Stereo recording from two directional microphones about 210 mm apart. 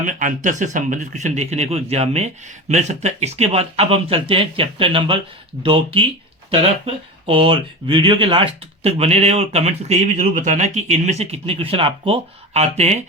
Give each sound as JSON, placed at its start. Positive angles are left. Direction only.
{"t": 0.0, "sound": "speech", "side_deg": -40}